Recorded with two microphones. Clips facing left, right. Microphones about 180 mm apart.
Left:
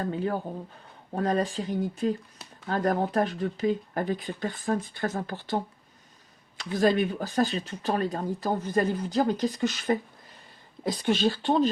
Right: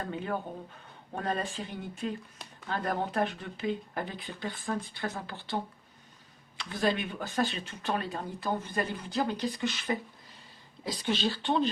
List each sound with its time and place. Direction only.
0.0 s speech: 35° left (ahead or behind)
6.6 s speech: 40° left (ahead or behind)